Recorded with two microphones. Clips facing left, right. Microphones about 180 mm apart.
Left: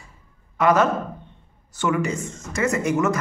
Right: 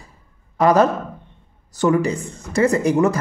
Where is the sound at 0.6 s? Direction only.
35° right (ahead or behind).